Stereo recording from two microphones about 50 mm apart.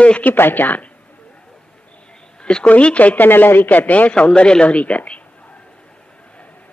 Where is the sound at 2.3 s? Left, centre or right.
Centre.